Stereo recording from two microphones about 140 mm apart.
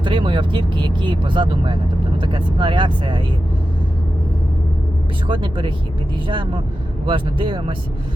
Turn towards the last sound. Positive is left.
turn(degrees=-35)  # may be behind; listen again after turning